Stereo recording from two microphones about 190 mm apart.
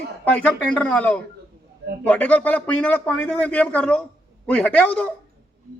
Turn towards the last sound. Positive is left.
turn(degrees=5)  # may be behind; listen again after turning